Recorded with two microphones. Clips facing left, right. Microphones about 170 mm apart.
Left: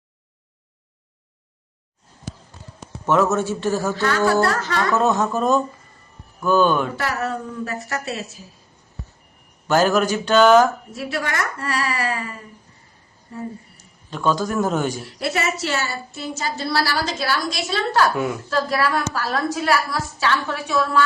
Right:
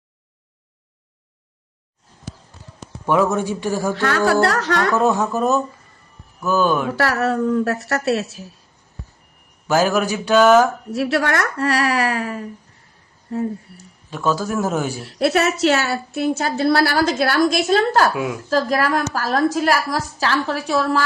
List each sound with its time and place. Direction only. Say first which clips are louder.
3.1 s speech: right 1 dB; 15° right (ahead or behind)
4.3 s a woman's voice: right 2 dB; 65° right (ahead or behind)
4.9 s speech: right 1 dB; 10° right (ahead or behind)
6.9 s a woman's voice: right 6 dB; 70° right (ahead or behind)
9.6 s speech: even; 10° right (ahead or behind)
10.9 s a woman's voice: right 6 dB; 75° right (ahead or behind)
14.1 s speech: even; 5° right (ahead or behind)
15.0 s a woman's voice: right 6 dB; 65° right (ahead or behind)
18.1 s a woman's voice: even; 5° right (ahead or behind)
18.5 s a woman's voice: right 4 dB; 40° right (ahead or behind)